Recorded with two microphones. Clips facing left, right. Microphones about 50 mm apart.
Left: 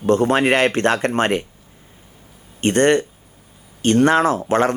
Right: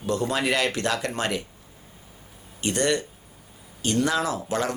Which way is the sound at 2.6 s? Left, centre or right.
Left.